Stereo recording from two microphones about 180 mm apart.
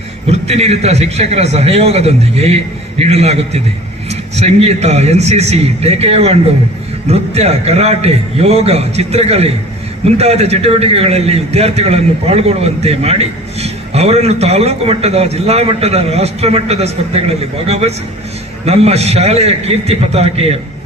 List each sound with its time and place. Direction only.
0.3 s a man's voice: 35° right (ahead or behind)